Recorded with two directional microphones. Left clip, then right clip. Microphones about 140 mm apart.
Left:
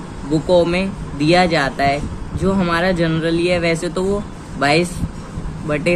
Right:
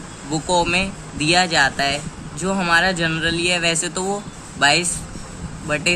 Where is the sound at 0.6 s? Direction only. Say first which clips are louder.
Left 2 dB; 45° right (ahead or behind).